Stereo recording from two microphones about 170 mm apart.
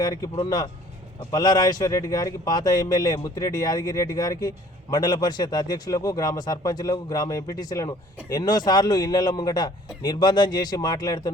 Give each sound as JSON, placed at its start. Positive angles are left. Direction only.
{"t": 0.0, "sound": "speech", "side_deg": 20}